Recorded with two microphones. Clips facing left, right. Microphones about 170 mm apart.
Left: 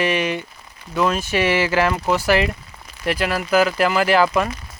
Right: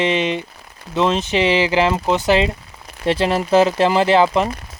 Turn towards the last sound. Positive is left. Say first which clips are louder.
# right 2 dB
turn(degrees=-25)  # may be behind; listen again after turning